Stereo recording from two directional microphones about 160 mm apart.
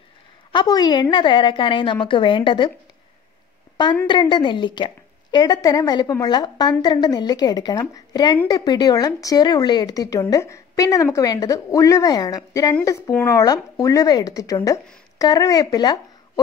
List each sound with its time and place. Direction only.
0.5 s a woman's voice: 25° left (ahead or behind)
4.1 s a woman's voice: 30° left (ahead or behind)